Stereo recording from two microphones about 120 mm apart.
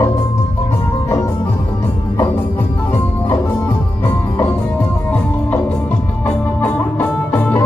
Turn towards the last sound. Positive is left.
turn(degrees=15)  # may be behind; listen again after turning